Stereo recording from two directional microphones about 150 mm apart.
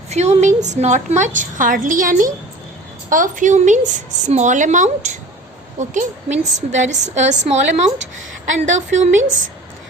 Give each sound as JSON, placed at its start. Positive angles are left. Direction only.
{"t": 0.1, "sound": "a woman's voice", "side_deg": -50}